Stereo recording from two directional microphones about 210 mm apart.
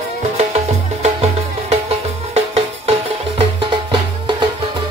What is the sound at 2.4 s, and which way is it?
Music, 30° right (ahead or behind).